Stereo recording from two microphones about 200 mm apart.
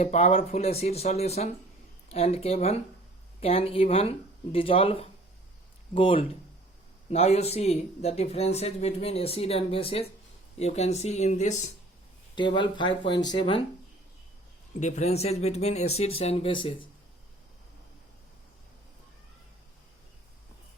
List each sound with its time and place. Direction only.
0.0 s speech: 35° left (ahead or behind)
12.4 s speech: 25° left (ahead or behind)
14.8 s speech: 35° left (ahead or behind)